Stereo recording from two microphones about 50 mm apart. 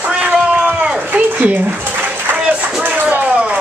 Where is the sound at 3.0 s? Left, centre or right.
Right.